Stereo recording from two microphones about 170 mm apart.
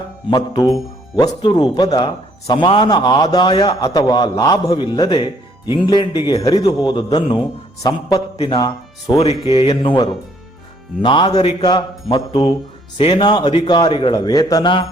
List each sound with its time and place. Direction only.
0.3 s a man's voice: 25° left (ahead or behind)